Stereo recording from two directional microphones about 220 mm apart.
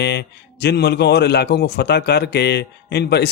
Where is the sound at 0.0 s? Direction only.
50° left (ahead or behind).